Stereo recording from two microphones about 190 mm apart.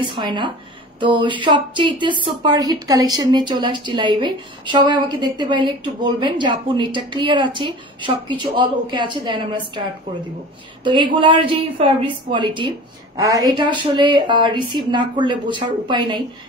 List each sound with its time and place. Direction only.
0.0 s a woman's voice: 25° right (ahead or behind)